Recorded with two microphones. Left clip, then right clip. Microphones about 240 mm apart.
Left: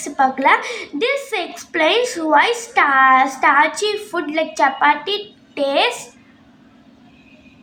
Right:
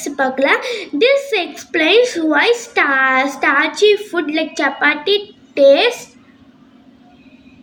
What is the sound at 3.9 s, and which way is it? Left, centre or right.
Speech, left.